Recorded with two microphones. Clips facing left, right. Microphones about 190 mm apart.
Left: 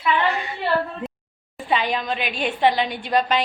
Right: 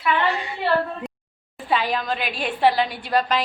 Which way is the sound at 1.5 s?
Centre (ahead or behind).